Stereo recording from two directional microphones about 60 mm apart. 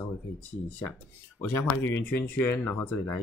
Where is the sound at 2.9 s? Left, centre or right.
Left.